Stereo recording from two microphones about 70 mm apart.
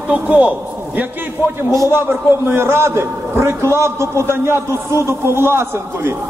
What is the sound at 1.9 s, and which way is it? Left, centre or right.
A man's voice, right.